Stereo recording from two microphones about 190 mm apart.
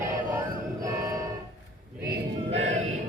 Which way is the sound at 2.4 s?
35° right (ahead or behind).